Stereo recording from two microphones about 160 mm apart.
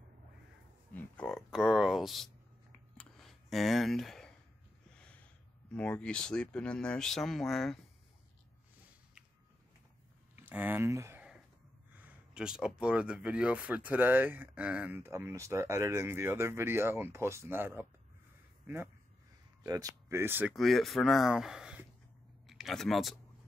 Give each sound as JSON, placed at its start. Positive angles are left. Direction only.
{"t": 0.9, "sound": "speech", "side_deg": 10}
{"t": 3.0, "sound": "a sound", "side_deg": 0}
{"t": 4.9, "sound": "speech", "side_deg": 5}
{"t": 10.3, "sound": "speech", "side_deg": -10}
{"t": 12.0, "sound": "speech", "side_deg": -5}
{"t": 19.6, "sound": "speech", "side_deg": -20}
{"t": 20.5, "sound": "speech", "side_deg": 0}